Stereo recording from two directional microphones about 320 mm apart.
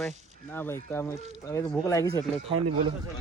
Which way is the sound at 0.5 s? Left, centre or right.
Centre.